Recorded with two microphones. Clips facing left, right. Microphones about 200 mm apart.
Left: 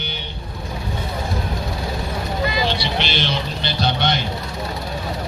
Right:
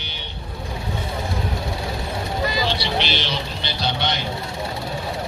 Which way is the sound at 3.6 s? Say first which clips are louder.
Left 4 dB; 55° left (ahead or behind).